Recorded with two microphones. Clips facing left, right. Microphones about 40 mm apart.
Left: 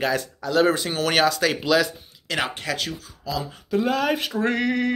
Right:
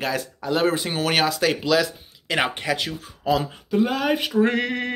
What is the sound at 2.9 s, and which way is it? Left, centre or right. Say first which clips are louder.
Speech: right 7 dB; right.